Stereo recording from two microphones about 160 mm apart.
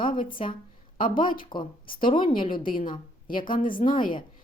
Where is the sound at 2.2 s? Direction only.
60° left (ahead or behind).